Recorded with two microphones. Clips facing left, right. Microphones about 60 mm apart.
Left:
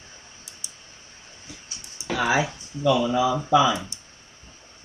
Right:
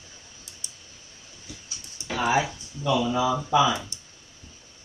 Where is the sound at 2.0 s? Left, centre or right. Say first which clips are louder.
Left 1 dB; left.